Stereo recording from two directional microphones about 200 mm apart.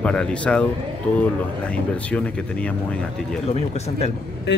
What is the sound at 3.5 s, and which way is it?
Speech, 30° left (ahead or behind).